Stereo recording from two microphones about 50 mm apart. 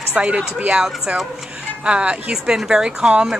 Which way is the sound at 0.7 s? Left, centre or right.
Centre.